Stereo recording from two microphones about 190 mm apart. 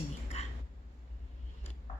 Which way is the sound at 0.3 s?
35° left (ahead or behind).